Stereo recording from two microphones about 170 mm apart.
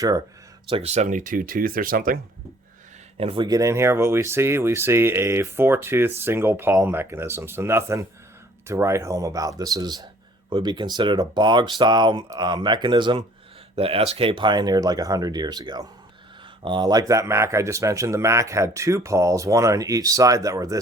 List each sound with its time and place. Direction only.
0.7 s speech: 40° right (ahead or behind); by 2.1 s 55° right (ahead or behind)
3.2 s speech: 30° right (ahead or behind)